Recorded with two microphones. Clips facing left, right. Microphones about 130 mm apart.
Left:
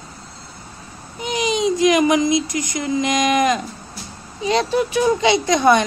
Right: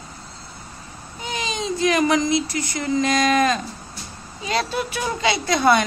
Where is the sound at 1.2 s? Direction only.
20° left (ahead or behind).